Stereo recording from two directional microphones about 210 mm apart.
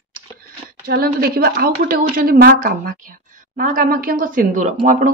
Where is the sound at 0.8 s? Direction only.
45° right (ahead or behind).